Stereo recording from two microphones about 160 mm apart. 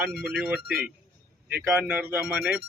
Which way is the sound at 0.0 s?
5° right (ahead or behind).